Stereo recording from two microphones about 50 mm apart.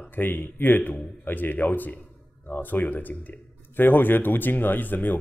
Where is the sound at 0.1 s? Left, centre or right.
Left.